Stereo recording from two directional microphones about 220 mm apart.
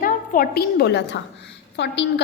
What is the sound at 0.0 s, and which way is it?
A woman's voice, 40° left (ahead or behind).